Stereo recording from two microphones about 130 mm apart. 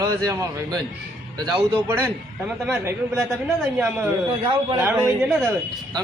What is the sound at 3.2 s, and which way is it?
A man's voice, 5° right (ahead or behind).